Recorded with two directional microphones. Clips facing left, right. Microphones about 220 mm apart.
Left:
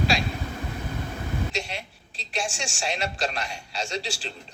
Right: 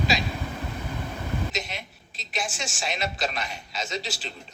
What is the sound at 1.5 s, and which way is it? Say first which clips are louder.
A man's voice: left 1 dB; 30° left (ahead or behind).